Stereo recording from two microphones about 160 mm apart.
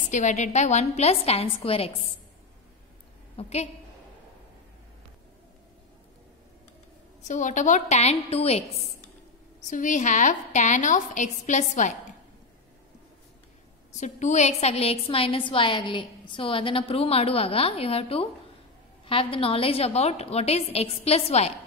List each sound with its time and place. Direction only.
0.1 s a woman's voice: 50° left (ahead or behind)
3.3 s a woman's voice: 40° left (ahead or behind)
7.2 s a woman's voice: 50° left (ahead or behind)
9.6 s a woman's voice: 55° left (ahead or behind)
13.9 s a woman's voice: 50° left (ahead or behind)